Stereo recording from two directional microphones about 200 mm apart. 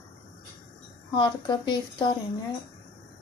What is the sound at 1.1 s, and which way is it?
Speech, 20° left (ahead or behind).